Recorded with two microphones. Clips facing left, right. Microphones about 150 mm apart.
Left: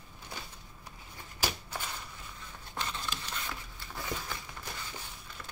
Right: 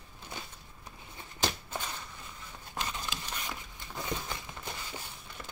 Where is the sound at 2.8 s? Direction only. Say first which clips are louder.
Even; 15° right (ahead or behind).